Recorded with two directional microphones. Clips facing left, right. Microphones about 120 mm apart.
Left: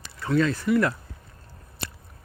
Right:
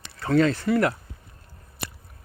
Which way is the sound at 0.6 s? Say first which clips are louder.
Even; 35° right (ahead or behind).